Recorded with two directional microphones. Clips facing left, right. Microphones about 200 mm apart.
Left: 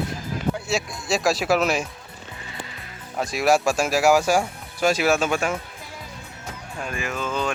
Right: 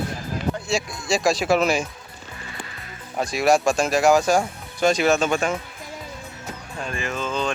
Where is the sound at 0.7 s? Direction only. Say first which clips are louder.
Right 1 dB; centre (ahead or behind).